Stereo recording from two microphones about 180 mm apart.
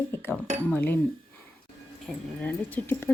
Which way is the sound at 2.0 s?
10° left (ahead or behind).